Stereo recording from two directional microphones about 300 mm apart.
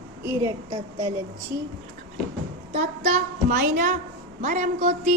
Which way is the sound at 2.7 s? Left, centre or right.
Right.